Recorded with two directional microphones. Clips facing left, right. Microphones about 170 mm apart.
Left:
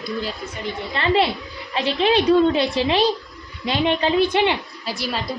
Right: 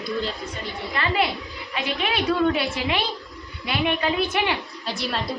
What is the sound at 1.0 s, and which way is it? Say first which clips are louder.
A woman's voice: left 5 dB; 30° left (ahead or behind).